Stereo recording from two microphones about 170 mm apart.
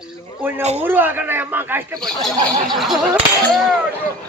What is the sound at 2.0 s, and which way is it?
A man's voice, centre (ahead or behind).